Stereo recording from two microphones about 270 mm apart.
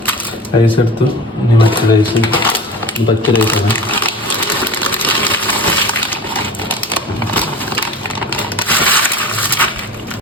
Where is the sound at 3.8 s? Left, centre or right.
Centre.